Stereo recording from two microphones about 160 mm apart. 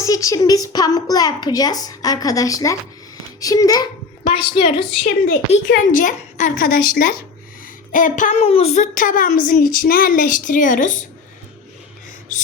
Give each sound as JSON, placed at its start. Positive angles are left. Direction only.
{"t": 0.0, "sound": "a woman's voice", "side_deg": 20}
{"t": 5.0, "sound": "a woman's voice", "side_deg": 50}
{"t": 12.3, "sound": "a sound", "side_deg": 50}